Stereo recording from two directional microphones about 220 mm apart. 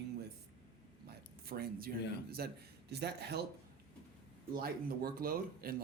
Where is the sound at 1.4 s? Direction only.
45° right (ahead or behind).